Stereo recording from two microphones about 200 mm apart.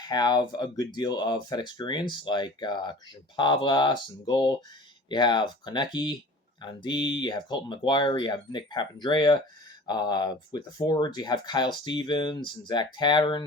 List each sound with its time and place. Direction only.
0.0 s speech: 20° left (ahead or behind)